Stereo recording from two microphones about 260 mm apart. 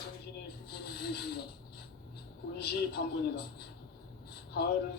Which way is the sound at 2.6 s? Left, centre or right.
Left.